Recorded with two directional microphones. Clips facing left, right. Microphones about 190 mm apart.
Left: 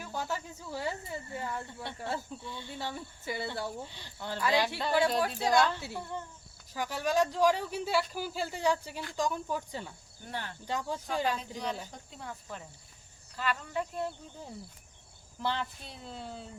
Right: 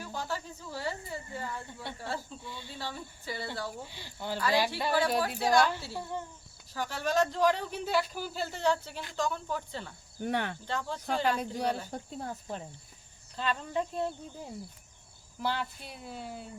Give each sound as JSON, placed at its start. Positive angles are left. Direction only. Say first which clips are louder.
{"t": 0.1, "sound": "a sound", "louder": "left 2 dB", "side_deg": 20}
{"t": 1.4, "sound": "speech", "louder": "left 2 dB", "side_deg": 20}
{"t": 4.0, "sound": "speech", "louder": "right 5 dB", "side_deg": -10}
{"t": 4.4, "sound": "speech", "louder": "even", "side_deg": 20}
{"t": 5.9, "sound": "speech", "louder": "right 2 dB", "side_deg": -15}
{"t": 6.7, "sound": "speech", "louder": "even", "side_deg": 10}
{"t": 10.2, "sound": "speech", "louder": "right 8 dB", "side_deg": -65}
{"t": 10.7, "sound": "speech", "louder": "left 1 dB", "side_deg": 10}
{"t": 11.0, "sound": "speech", "louder": "right 2 dB", "side_deg": -55}
{"t": 11.9, "sound": "speech", "louder": "right 6 dB", "side_deg": -40}
{"t": 15.4, "sound": "speech", "louder": "right 1 dB", "side_deg": -5}